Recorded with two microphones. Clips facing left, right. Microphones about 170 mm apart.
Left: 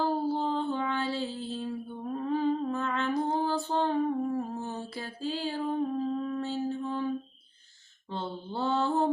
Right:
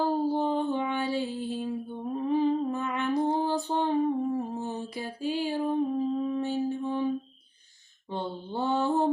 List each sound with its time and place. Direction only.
0.0 s music: 15° right (ahead or behind)
8.1 s mantra: 15° right (ahead or behind)